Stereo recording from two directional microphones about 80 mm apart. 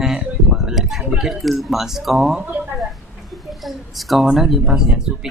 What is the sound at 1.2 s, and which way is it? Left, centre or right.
Speech, centre.